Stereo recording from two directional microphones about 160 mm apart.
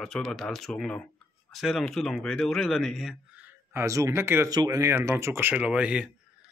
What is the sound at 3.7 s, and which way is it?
Speech, 20° right (ahead or behind).